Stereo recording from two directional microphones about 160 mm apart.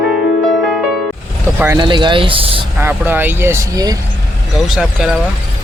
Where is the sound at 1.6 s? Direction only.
20° right (ahead or behind).